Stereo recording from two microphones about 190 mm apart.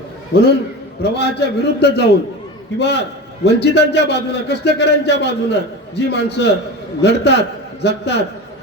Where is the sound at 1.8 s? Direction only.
60° left (ahead or behind).